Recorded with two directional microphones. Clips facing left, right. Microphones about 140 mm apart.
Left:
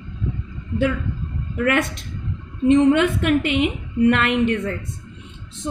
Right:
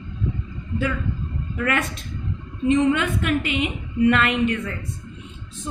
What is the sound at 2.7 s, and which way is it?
A woman's voice, 60° left (ahead or behind).